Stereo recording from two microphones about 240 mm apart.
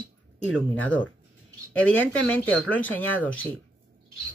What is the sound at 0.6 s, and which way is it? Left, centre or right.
Speech, centre.